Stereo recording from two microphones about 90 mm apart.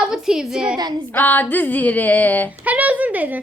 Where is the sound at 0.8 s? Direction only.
50° right (ahead or behind).